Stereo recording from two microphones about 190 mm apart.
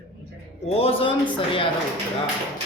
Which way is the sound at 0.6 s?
30° left (ahead or behind).